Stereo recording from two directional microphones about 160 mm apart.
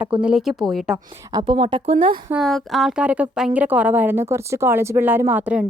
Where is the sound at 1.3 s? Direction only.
35° right (ahead or behind).